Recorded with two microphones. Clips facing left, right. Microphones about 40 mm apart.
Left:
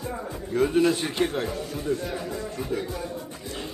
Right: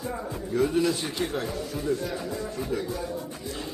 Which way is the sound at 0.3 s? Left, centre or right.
Left.